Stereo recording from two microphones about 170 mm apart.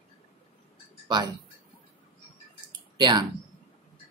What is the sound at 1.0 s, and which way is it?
Speech, 25° right (ahead or behind).